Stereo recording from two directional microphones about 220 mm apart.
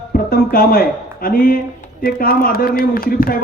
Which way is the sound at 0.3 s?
45° left (ahead or behind).